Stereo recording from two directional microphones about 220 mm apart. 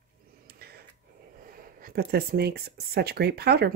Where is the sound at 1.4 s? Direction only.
40° right (ahead or behind).